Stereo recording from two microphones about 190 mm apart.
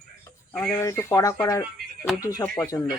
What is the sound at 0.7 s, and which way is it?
Speech, 15° left (ahead or behind).